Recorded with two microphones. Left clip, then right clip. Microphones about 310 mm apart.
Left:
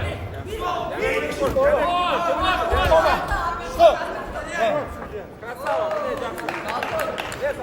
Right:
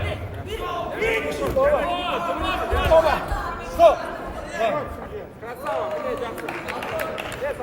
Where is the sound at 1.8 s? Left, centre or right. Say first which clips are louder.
Left 4 dB; left.